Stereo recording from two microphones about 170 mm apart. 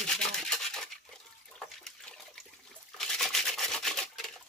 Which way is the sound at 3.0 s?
Centre (ahead or behind).